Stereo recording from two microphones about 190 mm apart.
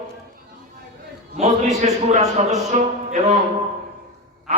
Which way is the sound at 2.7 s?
35° right (ahead or behind).